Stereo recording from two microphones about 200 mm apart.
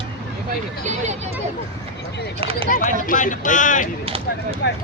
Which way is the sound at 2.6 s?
40° left (ahead or behind).